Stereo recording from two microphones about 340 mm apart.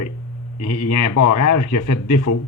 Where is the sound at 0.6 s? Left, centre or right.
Left.